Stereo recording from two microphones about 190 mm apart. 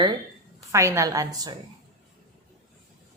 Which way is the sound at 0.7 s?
15° right (ahead or behind).